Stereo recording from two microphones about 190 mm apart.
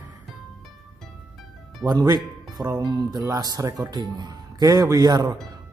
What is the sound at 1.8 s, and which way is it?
Speech, 20° right (ahead or behind).